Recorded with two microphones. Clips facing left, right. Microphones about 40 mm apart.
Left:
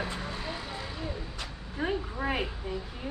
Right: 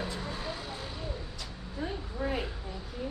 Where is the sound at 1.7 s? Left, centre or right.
Left.